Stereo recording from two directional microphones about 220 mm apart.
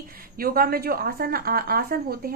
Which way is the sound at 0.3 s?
40° right (ahead or behind).